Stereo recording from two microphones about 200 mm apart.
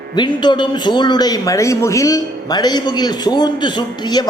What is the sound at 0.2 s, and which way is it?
A man's voice, 20° left (ahead or behind).